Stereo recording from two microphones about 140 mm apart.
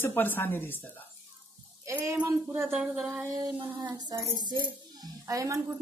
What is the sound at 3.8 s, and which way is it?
A woman's voice, 30° right (ahead or behind).